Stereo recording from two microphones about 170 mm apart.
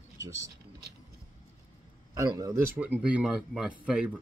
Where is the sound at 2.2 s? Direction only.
20° right (ahead or behind).